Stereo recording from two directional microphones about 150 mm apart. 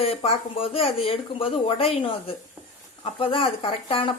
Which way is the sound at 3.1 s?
35° left (ahead or behind).